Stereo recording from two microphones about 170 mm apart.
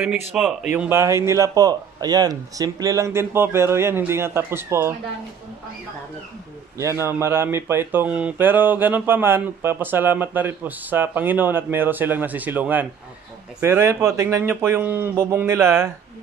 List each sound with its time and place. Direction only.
0.0 s speech: 5° right (ahead or behind)
0.7 s speech: 15° right (ahead or behind)
6.8 s speech: 15° right (ahead or behind)